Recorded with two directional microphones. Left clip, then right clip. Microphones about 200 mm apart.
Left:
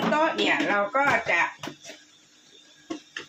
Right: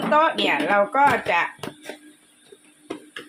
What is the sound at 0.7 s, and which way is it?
Speech, 50° right (ahead or behind).